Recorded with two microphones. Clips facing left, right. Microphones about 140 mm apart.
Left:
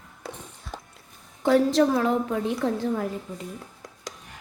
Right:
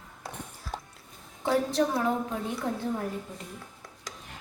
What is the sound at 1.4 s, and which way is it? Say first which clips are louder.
A woman's voice: left 6 dB; 90° left.